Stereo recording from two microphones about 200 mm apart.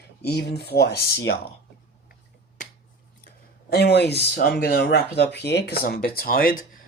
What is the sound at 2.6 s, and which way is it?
Finger snapping, 40° left (ahead or behind).